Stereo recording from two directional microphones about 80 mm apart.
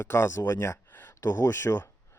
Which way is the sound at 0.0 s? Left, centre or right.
Left.